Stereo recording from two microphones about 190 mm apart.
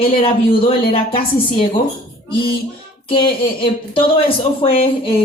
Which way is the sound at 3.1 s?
25° left (ahead or behind).